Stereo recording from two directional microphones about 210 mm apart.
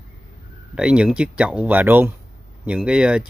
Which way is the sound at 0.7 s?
5° right (ahead or behind).